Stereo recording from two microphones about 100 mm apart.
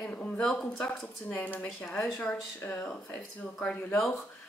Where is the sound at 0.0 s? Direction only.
10° left (ahead or behind).